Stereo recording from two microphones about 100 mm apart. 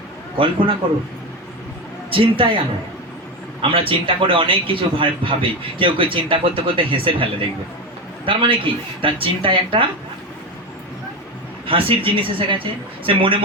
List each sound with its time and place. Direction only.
0.3 s a man's voice: 60° right (ahead or behind)
2.1 s a man's voice: 65° right (ahead or behind)
3.6 s a man's voice: 65° right (ahead or behind)
11.6 s a man's voice: 60° right (ahead or behind)